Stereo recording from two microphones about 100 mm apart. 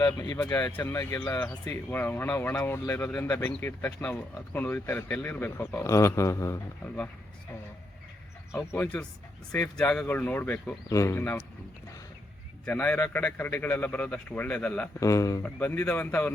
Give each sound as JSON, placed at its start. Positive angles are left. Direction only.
{"t": 0.4, "sound": "speech", "side_deg": 35}
{"t": 1.2, "sound": "speech", "side_deg": 15}
{"t": 5.8, "sound": "a sound", "side_deg": 30}
{"t": 8.5, "sound": "speech", "side_deg": 20}
{"t": 10.8, "sound": "speech", "side_deg": 25}
{"t": 12.7, "sound": "speech", "side_deg": 20}
{"t": 15.0, "sound": "a sound", "side_deg": 35}
{"t": 15.4, "sound": "speech", "side_deg": 15}